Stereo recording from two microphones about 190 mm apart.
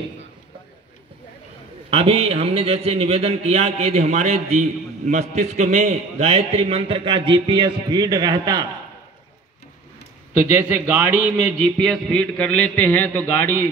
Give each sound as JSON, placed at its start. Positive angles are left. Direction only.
{"t": 1.9, "sound": "a man's voice", "side_deg": -30}
{"t": 10.3, "sound": "a man's voice", "side_deg": -10}